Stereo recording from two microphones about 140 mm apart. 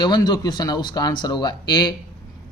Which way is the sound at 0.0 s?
30° left (ahead or behind).